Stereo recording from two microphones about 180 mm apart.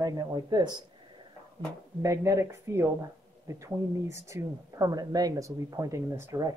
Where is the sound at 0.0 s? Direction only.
20° right (ahead or behind).